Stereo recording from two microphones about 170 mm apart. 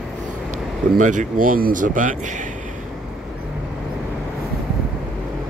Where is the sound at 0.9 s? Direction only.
50° right (ahead or behind).